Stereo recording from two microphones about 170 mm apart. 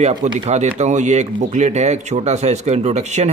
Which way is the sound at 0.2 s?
45° right (ahead or behind).